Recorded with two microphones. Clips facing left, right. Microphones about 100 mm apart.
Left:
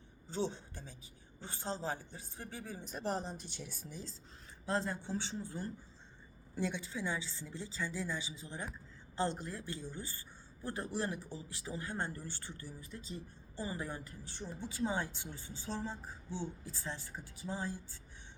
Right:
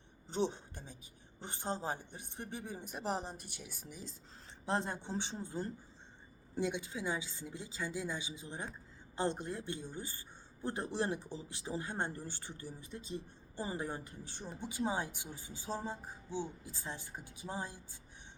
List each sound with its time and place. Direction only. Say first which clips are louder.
0.3 s a woman's voice: right 2 dB; 20° right (ahead or behind)